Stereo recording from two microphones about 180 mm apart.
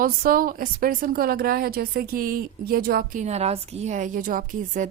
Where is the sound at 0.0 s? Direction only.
55° right (ahead or behind).